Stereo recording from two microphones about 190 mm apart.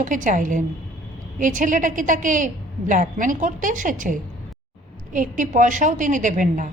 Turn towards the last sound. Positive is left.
turn(degrees=-40)  # may be behind; listen again after turning